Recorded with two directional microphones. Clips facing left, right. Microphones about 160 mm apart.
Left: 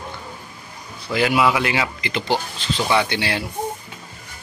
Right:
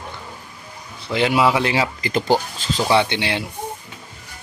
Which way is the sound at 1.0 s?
25° right (ahead or behind).